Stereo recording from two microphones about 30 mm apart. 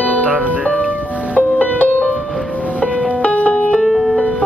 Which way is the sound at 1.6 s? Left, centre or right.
Left.